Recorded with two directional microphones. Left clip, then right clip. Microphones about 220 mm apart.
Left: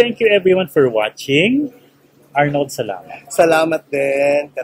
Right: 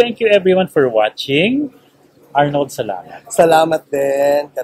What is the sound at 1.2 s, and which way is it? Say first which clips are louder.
Speech: even; 45° left (ahead or behind).